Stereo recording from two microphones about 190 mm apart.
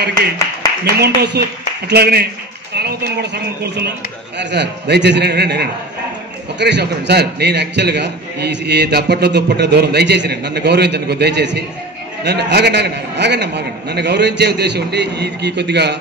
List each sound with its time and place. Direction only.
0.9 s a man's voice: 60° right (ahead or behind)
4.4 s a man's voice: 65° right (ahead or behind)